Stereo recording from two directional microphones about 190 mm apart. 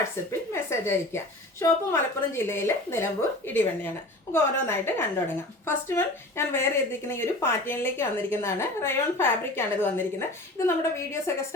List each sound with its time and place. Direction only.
0.3 s a woman's voice: 15° left (ahead or behind)